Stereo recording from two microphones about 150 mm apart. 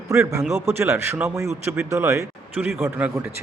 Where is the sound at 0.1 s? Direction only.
20° right (ahead or behind).